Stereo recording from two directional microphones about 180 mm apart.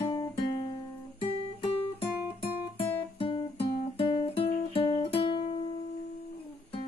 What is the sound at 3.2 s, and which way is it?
Music, 30° left (ahead or behind).